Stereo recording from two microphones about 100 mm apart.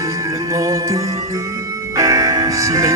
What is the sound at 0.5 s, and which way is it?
Music, 30° right (ahead or behind).